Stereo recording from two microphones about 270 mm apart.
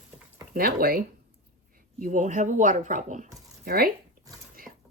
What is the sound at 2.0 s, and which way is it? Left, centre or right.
Speech, right.